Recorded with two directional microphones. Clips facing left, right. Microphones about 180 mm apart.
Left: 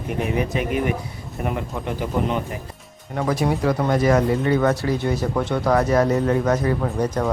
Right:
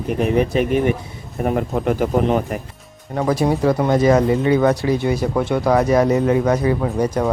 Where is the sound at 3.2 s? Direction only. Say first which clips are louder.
Right 4 dB; 30° right (ahead or behind).